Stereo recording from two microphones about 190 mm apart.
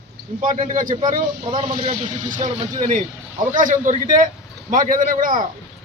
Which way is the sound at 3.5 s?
45° right (ahead or behind).